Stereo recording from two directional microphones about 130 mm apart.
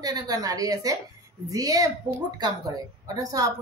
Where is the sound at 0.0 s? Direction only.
30° right (ahead or behind).